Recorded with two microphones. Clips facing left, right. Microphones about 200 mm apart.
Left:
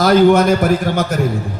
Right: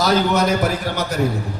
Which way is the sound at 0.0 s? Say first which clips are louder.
Left 7 dB; 55° left (ahead or behind).